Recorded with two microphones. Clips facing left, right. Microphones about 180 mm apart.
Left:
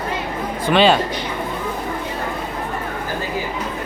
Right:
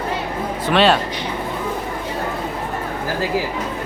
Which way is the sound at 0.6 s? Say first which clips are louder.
Left 1 dB; centre (ahead or behind).